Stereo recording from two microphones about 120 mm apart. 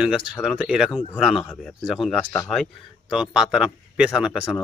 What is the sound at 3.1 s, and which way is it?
A man's voice, 5° right (ahead or behind).